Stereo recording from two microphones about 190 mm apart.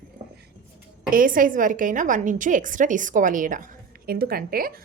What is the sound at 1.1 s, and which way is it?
A woman's voice, 45° right (ahead or behind).